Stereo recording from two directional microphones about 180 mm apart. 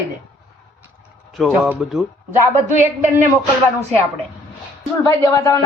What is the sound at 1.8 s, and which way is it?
Speech, 5° right (ahead or behind).